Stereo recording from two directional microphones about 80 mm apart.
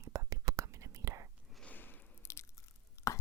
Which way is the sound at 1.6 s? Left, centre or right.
Left.